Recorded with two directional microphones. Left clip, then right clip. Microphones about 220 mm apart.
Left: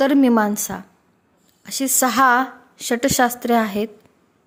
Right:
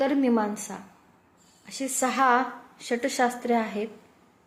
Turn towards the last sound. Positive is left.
turn(degrees=50)  # may be behind; listen again after turning